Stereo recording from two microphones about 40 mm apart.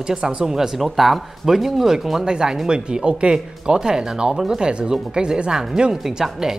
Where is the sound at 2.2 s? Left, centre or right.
Centre.